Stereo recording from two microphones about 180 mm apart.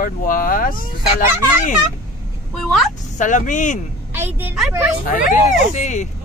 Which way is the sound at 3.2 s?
45° left (ahead or behind).